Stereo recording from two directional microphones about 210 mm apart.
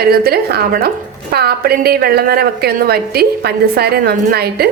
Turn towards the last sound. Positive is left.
turn(degrees=-50)  # may be behind; listen again after turning